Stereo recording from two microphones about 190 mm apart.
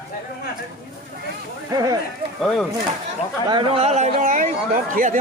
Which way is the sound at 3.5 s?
30° right (ahead or behind).